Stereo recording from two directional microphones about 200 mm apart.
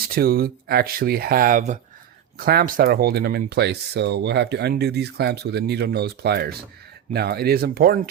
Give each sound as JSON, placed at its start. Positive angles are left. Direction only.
{"t": 0.1, "sound": "speech", "side_deg": -50}
{"t": 2.4, "sound": "speech", "side_deg": -50}